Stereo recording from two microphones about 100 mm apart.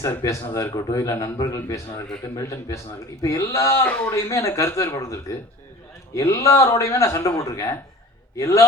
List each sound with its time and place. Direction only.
0.0 s a man's voice: 30° left (ahead or behind)